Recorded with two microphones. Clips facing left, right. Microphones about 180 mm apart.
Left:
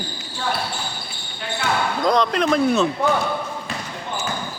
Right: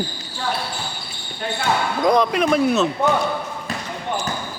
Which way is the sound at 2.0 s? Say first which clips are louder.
Right 2 dB; 10° right (ahead or behind).